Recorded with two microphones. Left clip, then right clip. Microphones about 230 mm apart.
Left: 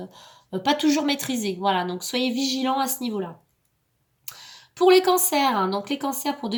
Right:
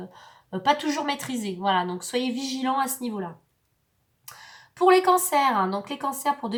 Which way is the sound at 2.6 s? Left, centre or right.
Right.